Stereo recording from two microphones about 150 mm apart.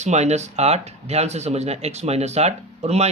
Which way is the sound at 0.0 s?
50° right (ahead or behind).